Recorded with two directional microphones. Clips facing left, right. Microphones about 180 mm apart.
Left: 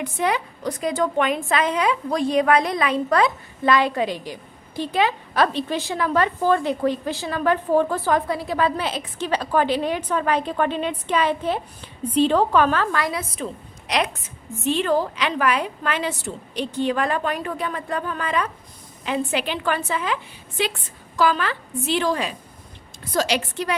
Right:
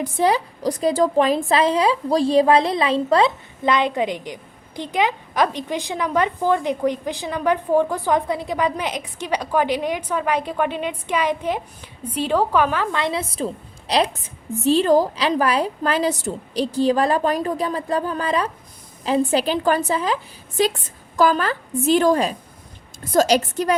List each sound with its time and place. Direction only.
0.0 s a woman's voice: 35° right (ahead or behind)